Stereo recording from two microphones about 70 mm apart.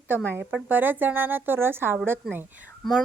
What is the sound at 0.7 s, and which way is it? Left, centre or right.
A woman's voice, right.